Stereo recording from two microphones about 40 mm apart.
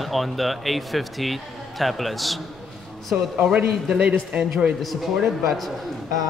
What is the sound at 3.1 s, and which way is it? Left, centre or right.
Speech, right.